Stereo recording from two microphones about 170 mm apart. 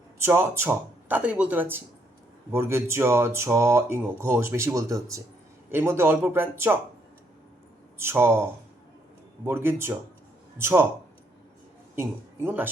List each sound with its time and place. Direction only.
0.2 s speech: 15° right (ahead or behind)
7.9 s speech: 15° right (ahead or behind)